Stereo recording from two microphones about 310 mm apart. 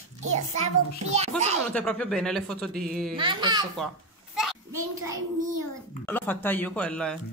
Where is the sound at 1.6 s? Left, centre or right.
Centre.